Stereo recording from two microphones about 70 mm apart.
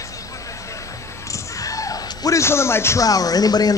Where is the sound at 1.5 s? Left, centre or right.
Left.